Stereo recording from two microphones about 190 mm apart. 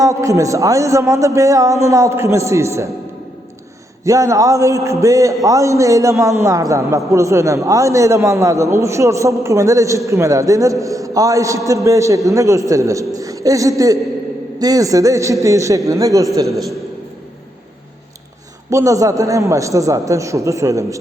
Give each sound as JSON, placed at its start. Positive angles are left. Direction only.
{"t": 0.0, "sound": "a man's voice", "side_deg": -15}
{"t": 4.0, "sound": "a man's voice", "side_deg": -15}
{"t": 18.7, "sound": "a man's voice", "side_deg": -15}